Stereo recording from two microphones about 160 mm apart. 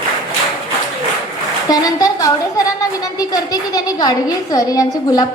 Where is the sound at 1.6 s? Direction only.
25° left (ahead or behind).